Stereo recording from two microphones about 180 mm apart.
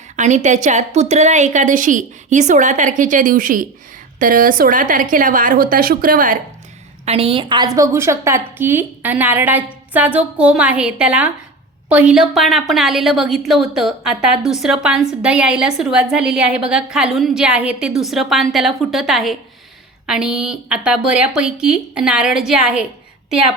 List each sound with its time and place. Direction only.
0.2 s a woman's voice: 40° right (ahead or behind)
7.0 s a woman's voice: 35° right (ahead or behind); by 22.9 s 5° right (ahead or behind)